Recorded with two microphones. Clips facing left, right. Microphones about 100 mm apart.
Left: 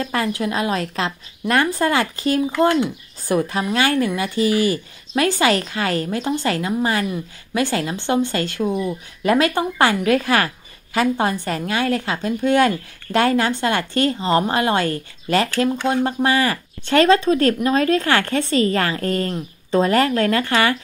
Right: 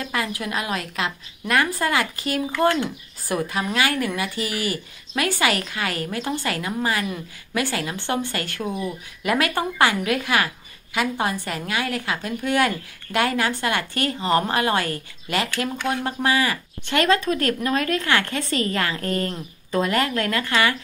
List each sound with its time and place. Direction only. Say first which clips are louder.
0.0 s a woman's voice: left 5 dB; 30° left (ahead or behind)
9.2 s a woman's voice: left 5 dB; 35° left (ahead or behind)